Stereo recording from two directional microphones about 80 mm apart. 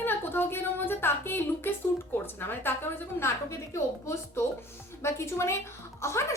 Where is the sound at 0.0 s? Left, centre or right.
Left.